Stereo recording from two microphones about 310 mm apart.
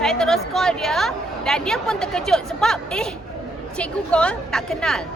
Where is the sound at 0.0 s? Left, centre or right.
Centre.